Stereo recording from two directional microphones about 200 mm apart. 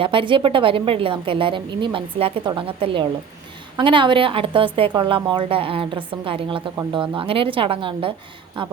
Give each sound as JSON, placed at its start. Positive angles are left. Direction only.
{"t": 0.0, "sound": "a woman's voice", "side_deg": -25}